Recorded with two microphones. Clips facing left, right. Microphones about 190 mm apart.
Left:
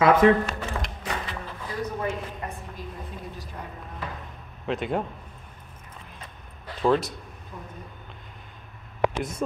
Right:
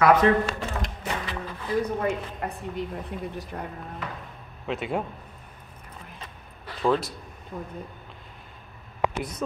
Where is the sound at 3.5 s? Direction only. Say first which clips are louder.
Right 3 dB; 55° right (ahead or behind).